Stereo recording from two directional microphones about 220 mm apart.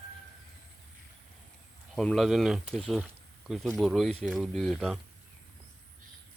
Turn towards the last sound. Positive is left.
turn(degrees=0)  # may be behind; listen again after turning